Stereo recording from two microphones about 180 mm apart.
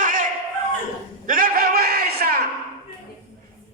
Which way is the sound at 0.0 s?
45° right (ahead or behind).